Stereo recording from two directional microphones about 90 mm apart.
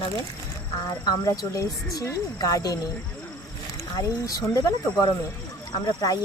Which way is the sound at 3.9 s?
40° left (ahead or behind).